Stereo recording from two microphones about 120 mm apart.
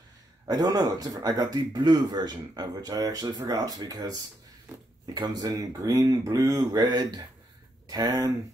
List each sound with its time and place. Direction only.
0.5 s speech: 35° right (ahead or behind)